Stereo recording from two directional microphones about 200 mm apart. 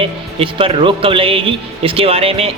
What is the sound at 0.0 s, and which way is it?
Speech, 30° right (ahead or behind).